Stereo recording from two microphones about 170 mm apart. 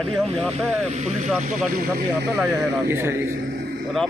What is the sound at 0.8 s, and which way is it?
Speech, 40° right (ahead or behind).